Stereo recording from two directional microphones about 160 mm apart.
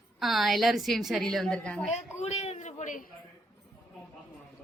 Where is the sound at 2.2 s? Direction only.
45° left (ahead or behind).